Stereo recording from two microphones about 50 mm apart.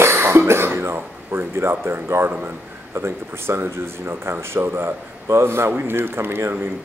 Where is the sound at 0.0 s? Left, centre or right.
Right.